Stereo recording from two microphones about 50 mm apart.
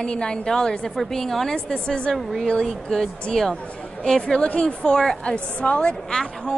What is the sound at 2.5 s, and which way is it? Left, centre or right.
A woman's voice, centre.